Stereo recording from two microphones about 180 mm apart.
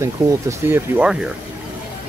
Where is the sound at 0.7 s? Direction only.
5° right (ahead or behind).